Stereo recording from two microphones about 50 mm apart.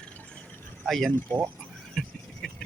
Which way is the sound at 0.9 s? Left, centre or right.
Centre.